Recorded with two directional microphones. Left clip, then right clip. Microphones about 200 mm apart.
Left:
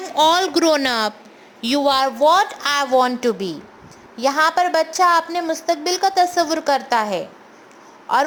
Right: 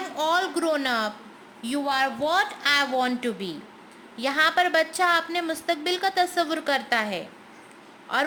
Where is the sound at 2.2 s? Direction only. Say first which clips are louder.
Left 8 dB; 20° left (ahead or behind).